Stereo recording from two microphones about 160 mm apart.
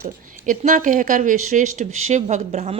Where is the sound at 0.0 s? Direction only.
50° right (ahead or behind).